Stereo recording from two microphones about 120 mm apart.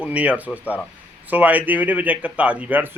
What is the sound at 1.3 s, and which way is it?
Speech, 15° right (ahead or behind).